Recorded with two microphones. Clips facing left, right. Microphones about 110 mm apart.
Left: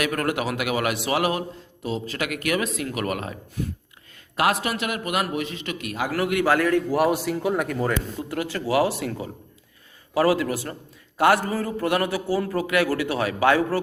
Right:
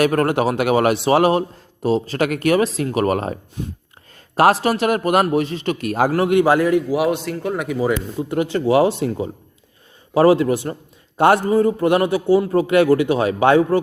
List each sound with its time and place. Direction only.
0.0 s a man's voice: 35° right (ahead or behind)
3.6 s a man's voice: 20° right (ahead or behind)
4.4 s a man's voice: 35° right (ahead or behind)
6.1 s a man's voice: 25° right (ahead or behind)
7.1 s speech: 5° left (ahead or behind)
8.3 s a man's voice: 25° right (ahead or behind)